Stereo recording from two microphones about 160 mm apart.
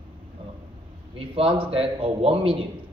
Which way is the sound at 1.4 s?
35° right (ahead or behind).